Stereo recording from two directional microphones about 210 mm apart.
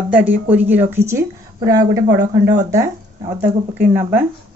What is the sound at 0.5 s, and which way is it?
Speech, 10° right (ahead or behind).